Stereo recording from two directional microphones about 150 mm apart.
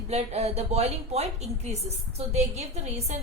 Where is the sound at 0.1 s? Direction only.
45° right (ahead or behind).